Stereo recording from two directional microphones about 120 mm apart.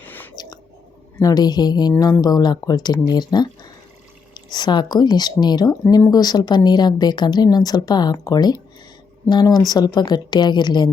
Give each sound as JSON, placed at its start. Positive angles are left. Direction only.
{"t": 0.0, "sound": "chewing", "side_deg": 15}
{"t": 1.2, "sound": "speech", "side_deg": 35}